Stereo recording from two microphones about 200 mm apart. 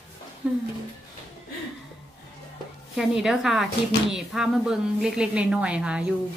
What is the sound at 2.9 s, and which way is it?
A woman's voice, centre (ahead or behind).